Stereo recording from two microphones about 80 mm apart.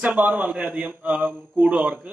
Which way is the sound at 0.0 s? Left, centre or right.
Centre.